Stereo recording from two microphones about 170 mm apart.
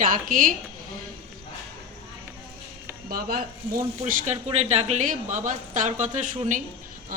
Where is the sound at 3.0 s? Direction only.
60° right (ahead or behind).